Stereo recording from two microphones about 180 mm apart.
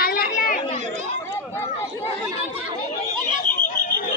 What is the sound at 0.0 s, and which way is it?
Chatter, 55° left (ahead or behind).